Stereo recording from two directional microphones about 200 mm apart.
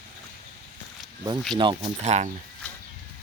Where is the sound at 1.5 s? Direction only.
25° right (ahead or behind).